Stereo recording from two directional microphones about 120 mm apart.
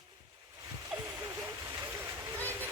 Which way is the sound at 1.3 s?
25° right (ahead or behind).